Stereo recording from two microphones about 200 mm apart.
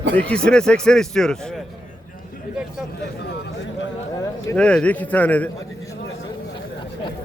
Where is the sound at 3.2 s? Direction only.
65° left (ahead or behind).